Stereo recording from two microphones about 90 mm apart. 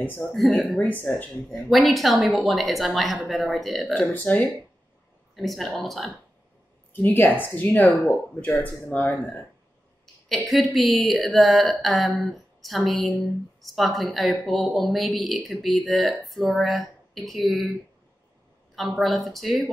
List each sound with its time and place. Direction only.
0.2 s speech: 5° left (ahead or behind)
0.7 s speech: 20° left (ahead or behind)
1.7 s speech: centre (ahead or behind)
4.0 s speech: 15° left (ahead or behind)
5.3 s speech: centre (ahead or behind)
6.9 s speech: 20° left (ahead or behind)
10.2 s speech: centre (ahead or behind)
18.8 s speech: centre (ahead or behind)